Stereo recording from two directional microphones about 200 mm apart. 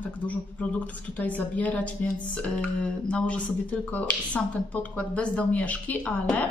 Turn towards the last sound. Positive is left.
turn(degrees=5)  # may be behind; listen again after turning